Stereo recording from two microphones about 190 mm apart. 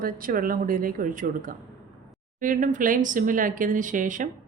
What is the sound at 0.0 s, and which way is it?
Speech, 50° right (ahead or behind).